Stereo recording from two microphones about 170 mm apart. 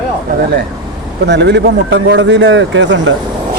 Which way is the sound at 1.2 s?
90° right.